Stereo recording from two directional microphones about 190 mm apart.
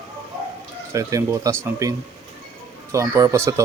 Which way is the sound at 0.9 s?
15° right (ahead or behind).